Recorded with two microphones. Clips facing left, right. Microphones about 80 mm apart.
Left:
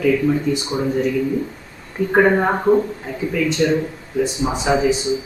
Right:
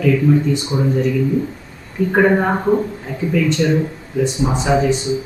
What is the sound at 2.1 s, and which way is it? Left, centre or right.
Speech, centre.